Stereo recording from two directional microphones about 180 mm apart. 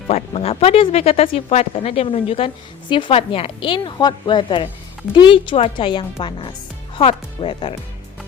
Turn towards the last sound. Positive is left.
turn(degrees=30)  # may be behind; listen again after turning